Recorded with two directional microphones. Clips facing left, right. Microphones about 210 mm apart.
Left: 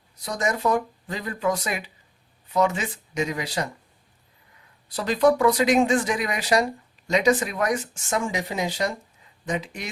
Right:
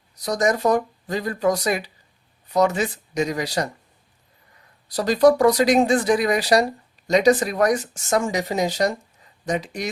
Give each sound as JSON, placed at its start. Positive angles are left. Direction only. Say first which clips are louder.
{"t": 0.3, "sound": "speech", "louder": "right 4 dB", "side_deg": -40}
{"t": 4.9, "sound": "speech", "louder": "right 4 dB", "side_deg": -40}